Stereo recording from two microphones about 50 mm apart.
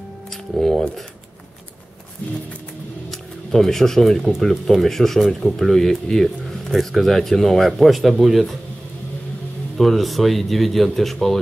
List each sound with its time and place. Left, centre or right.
0.3 s speech: centre
3.1 s a sound: centre
4.2 s a man's voice: centre
9.8 s a man's voice: centre